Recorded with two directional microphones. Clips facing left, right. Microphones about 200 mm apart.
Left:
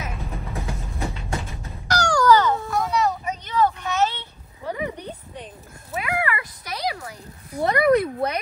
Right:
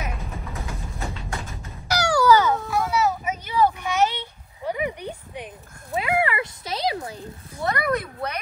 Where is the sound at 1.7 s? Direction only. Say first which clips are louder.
Even; 10° right (ahead or behind).